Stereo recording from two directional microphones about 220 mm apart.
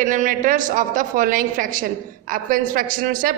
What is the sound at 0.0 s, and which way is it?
A woman's voice, 35° right (ahead or behind).